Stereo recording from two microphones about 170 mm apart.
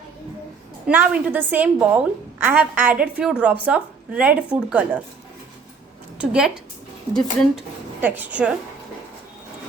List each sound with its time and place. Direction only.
0.9 s a woman's voice: 10° right (ahead or behind)
6.1 s speech: 5° right (ahead or behind)
8.0 s a woman's voice: 10° right (ahead or behind)